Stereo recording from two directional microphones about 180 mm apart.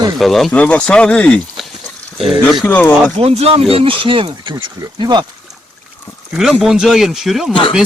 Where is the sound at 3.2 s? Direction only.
35° right (ahead or behind).